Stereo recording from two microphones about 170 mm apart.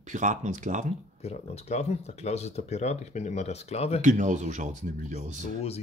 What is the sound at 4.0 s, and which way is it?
Speech, 45° right (ahead or behind).